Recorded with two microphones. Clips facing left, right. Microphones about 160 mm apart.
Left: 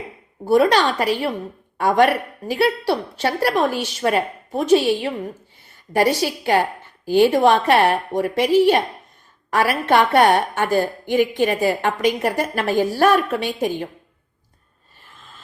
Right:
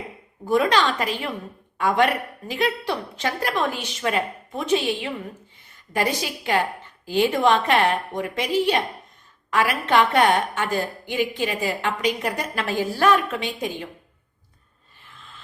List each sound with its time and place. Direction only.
0.4 s a woman's voice: 40° left (ahead or behind)